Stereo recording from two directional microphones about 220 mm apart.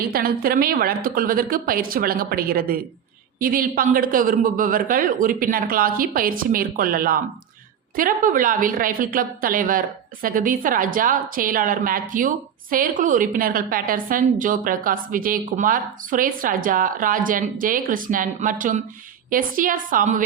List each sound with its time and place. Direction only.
0.1 s a woman's voice: 45° right (ahead or behind)